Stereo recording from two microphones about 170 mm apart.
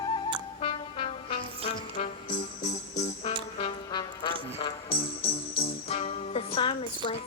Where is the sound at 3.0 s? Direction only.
45° left (ahead or behind).